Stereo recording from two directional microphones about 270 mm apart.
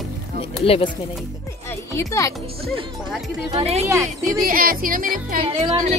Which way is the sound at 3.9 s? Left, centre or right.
Centre.